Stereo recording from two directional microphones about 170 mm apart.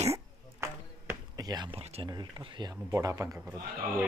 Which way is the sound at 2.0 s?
25° right (ahead or behind).